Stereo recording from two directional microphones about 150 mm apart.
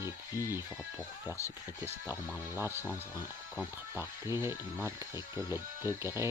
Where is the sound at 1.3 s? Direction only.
20° left (ahead or behind).